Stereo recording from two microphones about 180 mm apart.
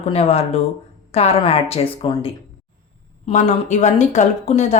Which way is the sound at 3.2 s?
40° left (ahead or behind).